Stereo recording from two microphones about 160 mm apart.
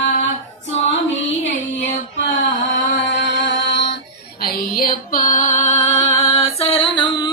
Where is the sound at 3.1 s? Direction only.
90° left.